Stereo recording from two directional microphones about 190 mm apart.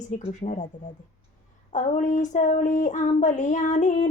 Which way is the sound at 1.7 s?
40° left (ahead or behind).